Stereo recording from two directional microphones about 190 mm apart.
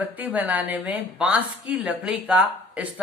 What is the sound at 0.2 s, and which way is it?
Speech, 5° right (ahead or behind).